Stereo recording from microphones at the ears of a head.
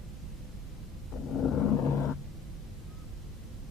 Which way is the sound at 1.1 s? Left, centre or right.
Left.